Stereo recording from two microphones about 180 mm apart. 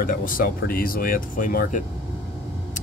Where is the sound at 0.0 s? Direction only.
50° left (ahead or behind).